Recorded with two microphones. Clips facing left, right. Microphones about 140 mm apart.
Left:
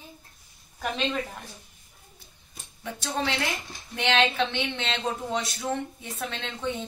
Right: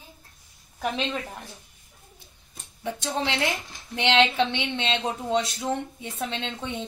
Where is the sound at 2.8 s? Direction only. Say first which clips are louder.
Right 2 dB; 20° right (ahead or behind).